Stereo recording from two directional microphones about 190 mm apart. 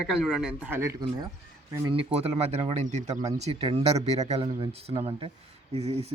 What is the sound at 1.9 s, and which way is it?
Speech, 30° right (ahead or behind).